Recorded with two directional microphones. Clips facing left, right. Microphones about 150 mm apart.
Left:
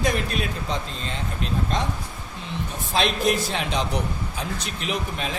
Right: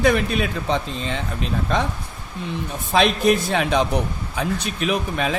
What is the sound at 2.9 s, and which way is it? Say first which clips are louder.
A man's voice: right 5 dB; 55° right (ahead or behind).